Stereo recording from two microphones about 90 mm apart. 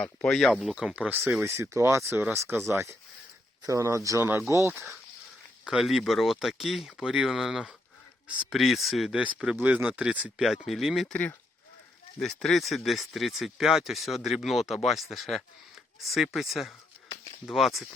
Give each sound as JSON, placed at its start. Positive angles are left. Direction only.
{"t": 0.0, "sound": "speech", "side_deg": 5}
{"t": 0.9, "sound": "speech", "side_deg": -15}
{"t": 1.5, "sound": "speech", "side_deg": -30}
{"t": 5.6, "sound": "speech", "side_deg": -5}
{"t": 9.1, "sound": "speech", "side_deg": -15}
{"t": 10.4, "sound": "speech", "side_deg": -5}
{"t": 11.1, "sound": "speech", "side_deg": 15}
{"t": 12.2, "sound": "speech", "side_deg": 5}